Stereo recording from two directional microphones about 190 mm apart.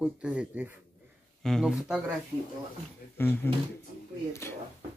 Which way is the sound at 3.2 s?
10° left (ahead or behind).